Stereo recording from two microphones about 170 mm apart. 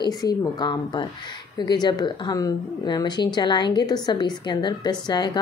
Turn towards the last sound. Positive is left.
turn(degrees=25)  # may be behind; listen again after turning